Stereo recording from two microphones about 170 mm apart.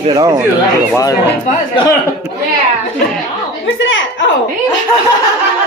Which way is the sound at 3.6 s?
90° left.